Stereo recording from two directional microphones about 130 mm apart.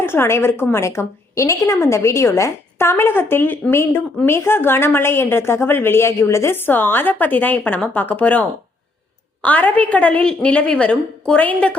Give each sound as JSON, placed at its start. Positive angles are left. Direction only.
{"t": 0.0, "sound": "a woman's voice", "side_deg": 20}